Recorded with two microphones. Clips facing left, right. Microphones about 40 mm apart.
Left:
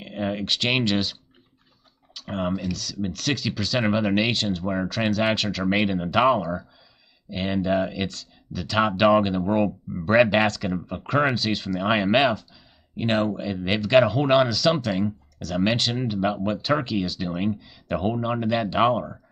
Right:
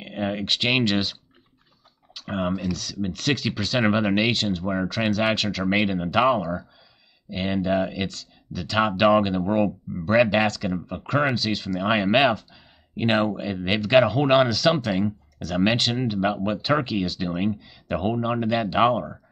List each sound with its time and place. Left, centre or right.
0.0 s speech: centre
2.1 s speech: centre
10.0 s speech: centre
12.9 s speech: right; by 19.1 s centre